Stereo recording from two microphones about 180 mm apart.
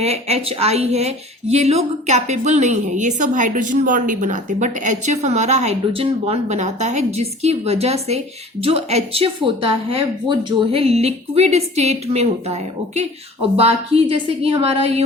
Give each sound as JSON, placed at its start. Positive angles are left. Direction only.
{"t": 0.0, "sound": "speech", "side_deg": -35}